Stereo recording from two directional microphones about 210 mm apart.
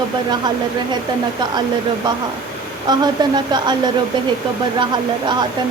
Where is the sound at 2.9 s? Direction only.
20° right (ahead or behind).